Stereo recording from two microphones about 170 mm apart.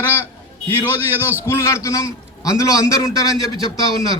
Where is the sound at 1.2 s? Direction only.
10° right (ahead or behind).